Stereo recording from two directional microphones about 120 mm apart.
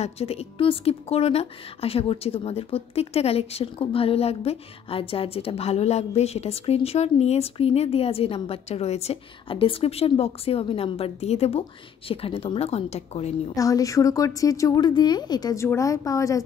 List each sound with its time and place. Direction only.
0.0 s a woman's voice: 60° left (ahead or behind)
13.6 s a woman's voice: 30° left (ahead or behind)